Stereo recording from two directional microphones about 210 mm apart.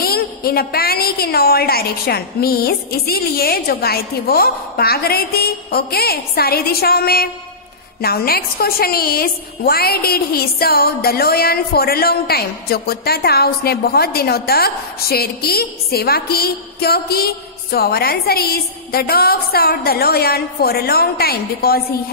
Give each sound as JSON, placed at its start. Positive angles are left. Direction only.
{"t": 0.0, "sound": "a woman's voice", "side_deg": 45}